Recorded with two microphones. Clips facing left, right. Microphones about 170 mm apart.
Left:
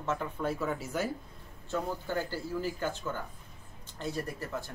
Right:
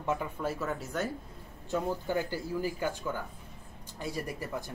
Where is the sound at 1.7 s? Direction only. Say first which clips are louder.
Right 2 dB; 15° right (ahead or behind).